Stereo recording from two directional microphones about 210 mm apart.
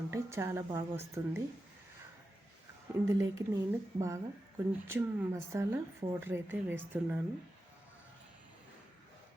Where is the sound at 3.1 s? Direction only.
15° right (ahead or behind).